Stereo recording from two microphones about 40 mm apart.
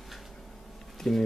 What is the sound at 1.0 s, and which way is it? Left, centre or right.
Speech, centre.